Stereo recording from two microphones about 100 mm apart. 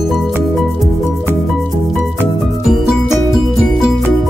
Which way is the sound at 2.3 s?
Centre (ahead or behind).